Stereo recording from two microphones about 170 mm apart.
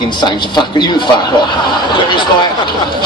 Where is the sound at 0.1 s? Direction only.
25° left (ahead or behind).